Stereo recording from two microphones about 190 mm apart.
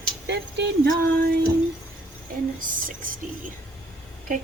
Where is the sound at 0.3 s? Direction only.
65° right (ahead or behind).